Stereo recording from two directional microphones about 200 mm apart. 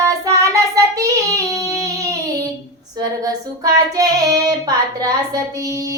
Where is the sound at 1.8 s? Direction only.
15° right (ahead or behind).